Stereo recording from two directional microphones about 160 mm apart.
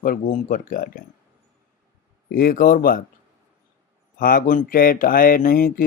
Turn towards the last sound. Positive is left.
turn(degrees=60)  # may be behind; listen again after turning